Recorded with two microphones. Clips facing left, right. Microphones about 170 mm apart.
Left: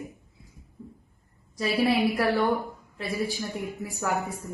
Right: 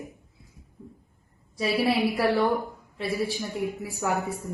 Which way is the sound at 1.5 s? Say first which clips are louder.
Even; centre (ahead or behind).